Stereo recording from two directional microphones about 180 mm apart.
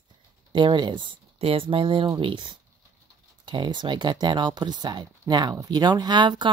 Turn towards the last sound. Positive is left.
turn(degrees=-25)  # may be behind; listen again after turning